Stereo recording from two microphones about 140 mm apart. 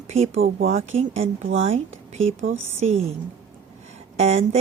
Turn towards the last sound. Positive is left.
turn(degrees=-50)  # may be behind; listen again after turning